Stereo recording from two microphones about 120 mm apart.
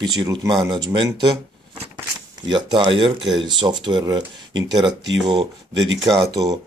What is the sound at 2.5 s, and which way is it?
Speech, 40° right (ahead or behind).